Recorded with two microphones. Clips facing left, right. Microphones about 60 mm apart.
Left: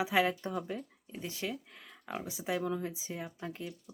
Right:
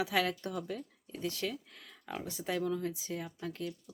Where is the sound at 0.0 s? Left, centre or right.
Left.